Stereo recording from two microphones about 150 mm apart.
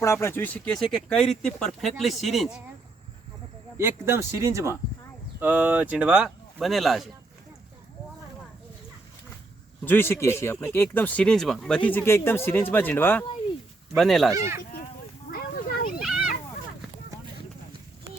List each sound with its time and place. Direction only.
0.0 s speech: 20° left (ahead or behind); by 2.6 s centre (ahead or behind)
3.8 s speech: 15° right (ahead or behind); by 7.1 s centre (ahead or behind)
9.8 s speech: 15° left (ahead or behind)
13.9 s speech: centre (ahead or behind)
15.3 s a sound: 80° left
16.0 s a sound: centre (ahead or behind)